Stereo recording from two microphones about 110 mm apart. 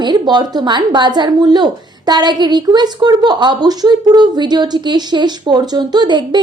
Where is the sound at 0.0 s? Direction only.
40° right (ahead or behind).